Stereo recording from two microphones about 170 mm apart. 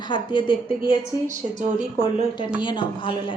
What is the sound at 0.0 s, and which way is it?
Speech, 30° left (ahead or behind).